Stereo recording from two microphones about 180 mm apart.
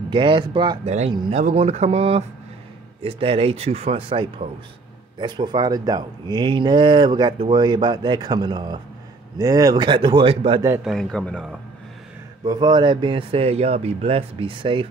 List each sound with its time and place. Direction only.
0.1 s speech: 25° right (ahead or behind)
0.8 s speech: 35° right (ahead or behind)
10.8 s a man's voice: centre (ahead or behind)
12.4 s speech: 25° right (ahead or behind)